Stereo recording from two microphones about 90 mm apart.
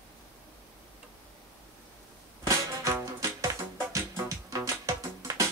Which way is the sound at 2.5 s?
35° right (ahead or behind).